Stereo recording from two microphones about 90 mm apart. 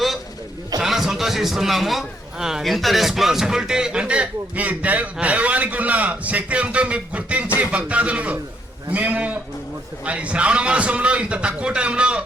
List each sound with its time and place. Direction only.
0.8 s a man's voice: 5° right (ahead or behind)